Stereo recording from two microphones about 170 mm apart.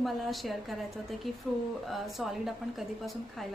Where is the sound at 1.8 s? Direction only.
Centre (ahead or behind).